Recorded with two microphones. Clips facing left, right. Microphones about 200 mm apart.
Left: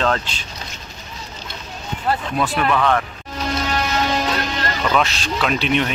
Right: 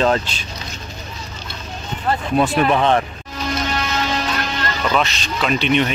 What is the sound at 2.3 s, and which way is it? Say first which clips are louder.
Speech: right 6 dB; 25° right (ahead or behind).